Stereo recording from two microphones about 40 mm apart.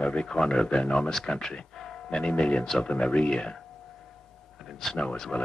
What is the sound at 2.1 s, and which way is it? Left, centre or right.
Speech, centre.